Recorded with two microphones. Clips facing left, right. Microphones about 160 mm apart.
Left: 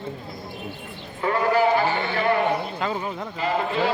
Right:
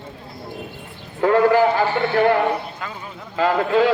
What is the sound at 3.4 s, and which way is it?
Speech, 90° right.